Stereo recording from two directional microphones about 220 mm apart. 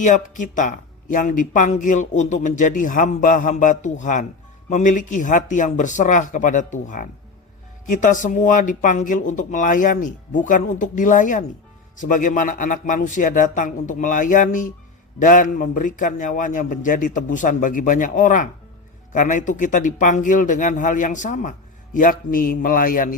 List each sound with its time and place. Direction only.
0.0 s speech: 35° left (ahead or behind)